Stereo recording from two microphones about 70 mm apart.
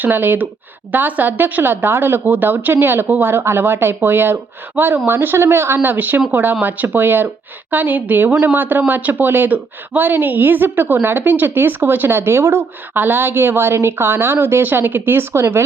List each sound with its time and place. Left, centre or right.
0.0 s a woman's voice: right